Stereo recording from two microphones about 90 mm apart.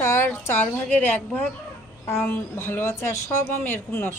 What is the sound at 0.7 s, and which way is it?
Speech, 10° left (ahead or behind).